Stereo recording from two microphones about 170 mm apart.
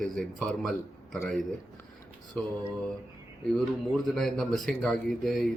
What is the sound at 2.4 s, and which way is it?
Speech, 5° left (ahead or behind).